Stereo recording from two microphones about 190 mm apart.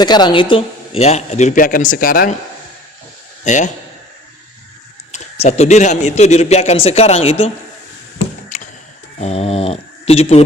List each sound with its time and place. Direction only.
0.0 s a man's voice: 25° left (ahead or behind); by 2.3 s 50° left (ahead or behind)
3.4 s a man's voice: 40° left (ahead or behind)
5.1 s a man's voice: 35° left (ahead or behind)
8.5 s a sound: 40° left (ahead or behind)
9.2 s dog: 30° left (ahead or behind)